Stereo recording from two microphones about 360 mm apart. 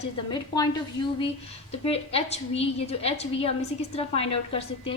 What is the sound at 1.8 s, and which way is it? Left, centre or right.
A woman's voice, centre.